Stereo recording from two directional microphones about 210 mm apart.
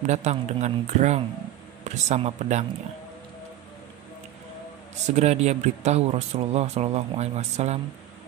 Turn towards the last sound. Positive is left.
turn(degrees=-30)  # may be behind; listen again after turning